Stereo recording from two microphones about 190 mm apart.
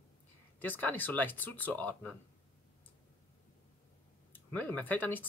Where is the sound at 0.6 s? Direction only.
10° left (ahead or behind).